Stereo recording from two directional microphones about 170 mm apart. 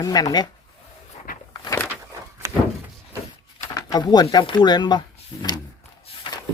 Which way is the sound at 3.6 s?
20° left (ahead or behind).